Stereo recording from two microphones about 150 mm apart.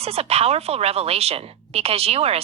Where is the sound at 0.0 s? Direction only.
40° right (ahead or behind).